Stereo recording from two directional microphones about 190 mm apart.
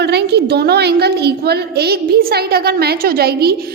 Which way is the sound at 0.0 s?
60° right (ahead or behind).